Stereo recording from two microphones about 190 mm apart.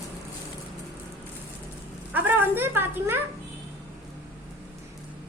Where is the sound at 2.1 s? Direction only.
10° right (ahead or behind).